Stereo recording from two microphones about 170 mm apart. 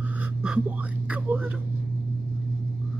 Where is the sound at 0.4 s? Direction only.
5° right (ahead or behind).